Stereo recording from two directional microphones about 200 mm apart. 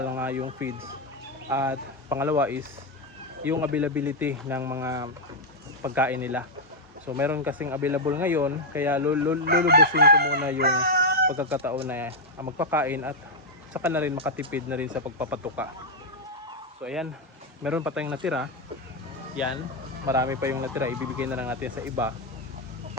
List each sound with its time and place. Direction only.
0.2 s a sound: 10° right (ahead or behind)
1.5 s speech: 15° right (ahead or behind)
9.4 s chicken: 50° right (ahead or behind)
10.6 s a sound: 50° right (ahead or behind)
11.3 s speech: 10° right (ahead or behind)
16.8 s speech: 5° right (ahead or behind)
19.4 s speech: 5° right (ahead or behind)
20.1 s speech: 15° right (ahead or behind)